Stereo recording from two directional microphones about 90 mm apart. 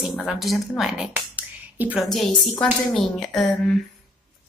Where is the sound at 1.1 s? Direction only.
20° right (ahead or behind).